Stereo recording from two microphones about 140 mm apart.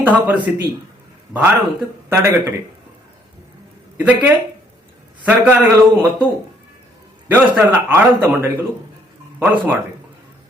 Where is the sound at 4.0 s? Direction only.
10° right (ahead or behind).